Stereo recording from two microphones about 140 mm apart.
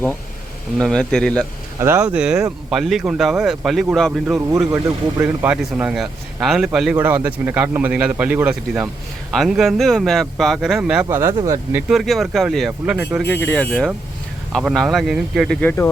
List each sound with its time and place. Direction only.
0.8 s speech: 5° left (ahead or behind)
1.8 s speech: 15° right (ahead or behind); by 4.4 s centre (ahead or behind)
4.4 s speech: 15° right (ahead or behind)
11.1 s speech: 20° right (ahead or behind)
11.9 s speech: centre (ahead or behind)
13.3 s speech: 10° left (ahead or behind)
15.6 s speech: 15° left (ahead or behind)